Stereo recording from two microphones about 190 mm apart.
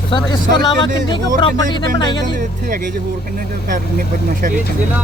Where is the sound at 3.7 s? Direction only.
45° right (ahead or behind).